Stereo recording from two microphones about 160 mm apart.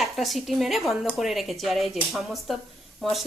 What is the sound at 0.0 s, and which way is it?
Speech, centre (ahead or behind).